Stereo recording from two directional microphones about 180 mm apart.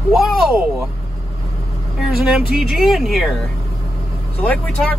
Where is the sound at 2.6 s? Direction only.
Centre (ahead or behind).